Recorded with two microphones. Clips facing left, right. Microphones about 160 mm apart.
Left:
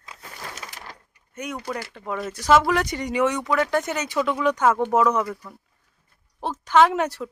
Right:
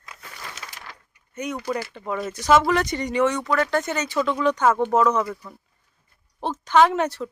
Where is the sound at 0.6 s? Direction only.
45° left (ahead or behind).